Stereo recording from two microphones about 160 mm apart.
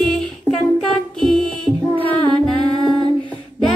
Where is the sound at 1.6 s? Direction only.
30° right (ahead or behind).